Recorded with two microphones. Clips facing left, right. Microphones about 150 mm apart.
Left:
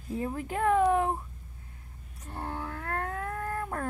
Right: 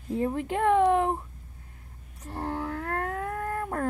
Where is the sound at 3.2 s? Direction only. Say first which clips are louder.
Right 3 dB; 20° right (ahead or behind).